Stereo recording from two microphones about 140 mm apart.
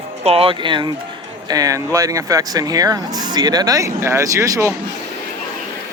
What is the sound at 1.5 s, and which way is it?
Speech, 25° right (ahead or behind).